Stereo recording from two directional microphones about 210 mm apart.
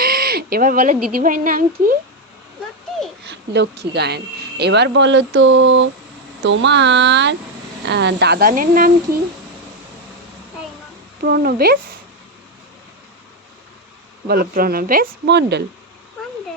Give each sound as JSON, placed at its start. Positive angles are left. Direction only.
{"t": 0.0, "sound": "crow", "side_deg": -45}
{"t": 1.1, "sound": "a woman's voice", "side_deg": -40}
{"t": 3.2, "sound": "speech", "side_deg": -55}
{"t": 11.2, "sound": "speech", "side_deg": -45}
{"t": 14.3, "sound": "speech", "side_deg": -45}